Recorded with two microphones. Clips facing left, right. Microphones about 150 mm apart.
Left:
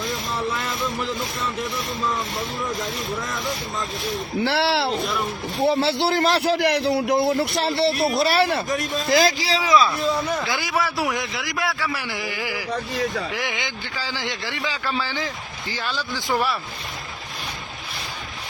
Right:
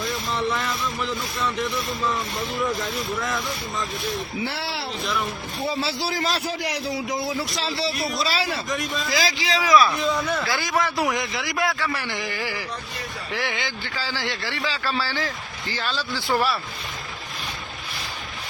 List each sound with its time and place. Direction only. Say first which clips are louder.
4.4 s speech: left 9 dB; 80° left
5.6 s a man's voice: left 7 dB; 60° left (ahead or behind)
8.7 s speech: left 5 dB; 45° left (ahead or behind)
9.4 s speech: even; 30° left (ahead or behind)
10.0 s a man's voice: left 1 dB; 10° left (ahead or behind)